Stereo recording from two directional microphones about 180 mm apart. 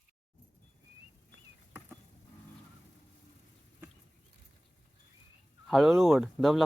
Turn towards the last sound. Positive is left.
turn(degrees=0)  # may be behind; listen again after turning